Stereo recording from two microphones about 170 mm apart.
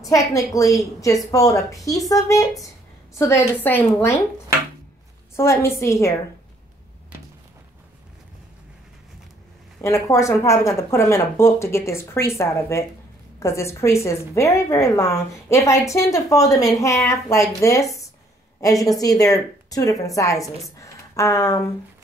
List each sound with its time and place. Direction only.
0.1 s a woman's voice: 20° left (ahead or behind)
5.3 s a woman's voice: 15° left (ahead or behind)
9.8 s a woman's voice: 15° left (ahead or behind)